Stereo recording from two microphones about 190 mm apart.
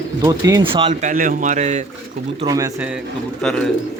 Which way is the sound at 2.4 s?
20° right (ahead or behind).